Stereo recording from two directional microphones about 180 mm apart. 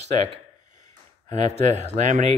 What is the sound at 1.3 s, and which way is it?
Speech, 40° right (ahead or behind).